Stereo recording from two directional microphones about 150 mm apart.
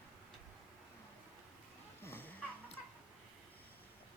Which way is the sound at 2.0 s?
15° left (ahead or behind).